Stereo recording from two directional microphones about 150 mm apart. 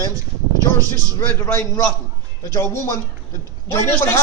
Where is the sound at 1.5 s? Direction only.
15° left (ahead or behind).